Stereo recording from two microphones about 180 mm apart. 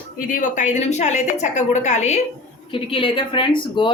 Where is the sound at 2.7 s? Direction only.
30° left (ahead or behind).